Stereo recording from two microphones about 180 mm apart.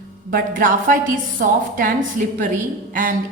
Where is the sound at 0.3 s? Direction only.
50° right (ahead or behind).